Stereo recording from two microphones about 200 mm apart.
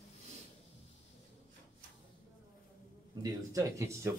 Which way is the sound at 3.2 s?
15° right (ahead or behind).